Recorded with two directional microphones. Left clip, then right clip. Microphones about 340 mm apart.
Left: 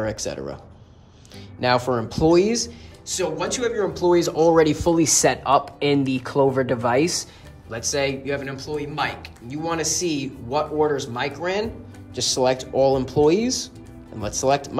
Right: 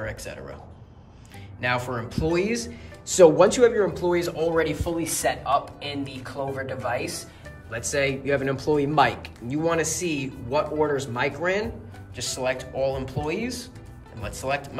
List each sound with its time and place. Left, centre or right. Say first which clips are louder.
0.0 s speech: left 7 dB; centre
1.6 s speech: left 6 dB; centre
3.1 s speech: right 9 dB; centre